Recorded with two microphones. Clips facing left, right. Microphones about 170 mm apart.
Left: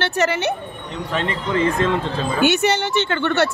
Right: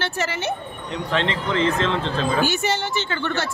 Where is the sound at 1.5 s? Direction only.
10° left (ahead or behind).